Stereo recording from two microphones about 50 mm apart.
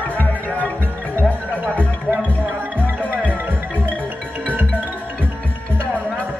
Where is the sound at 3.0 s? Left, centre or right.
Left.